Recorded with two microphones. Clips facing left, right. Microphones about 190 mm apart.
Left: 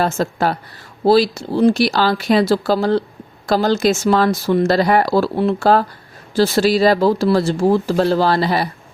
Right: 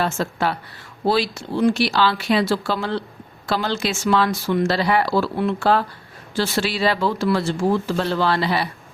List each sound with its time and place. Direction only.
0.0 s speech: 40° left (ahead or behind)